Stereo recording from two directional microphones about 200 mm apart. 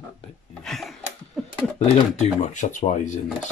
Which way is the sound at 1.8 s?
35° left (ahead or behind).